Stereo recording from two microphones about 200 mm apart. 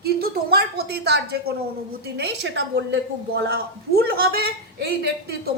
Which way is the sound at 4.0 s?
50° right (ahead or behind).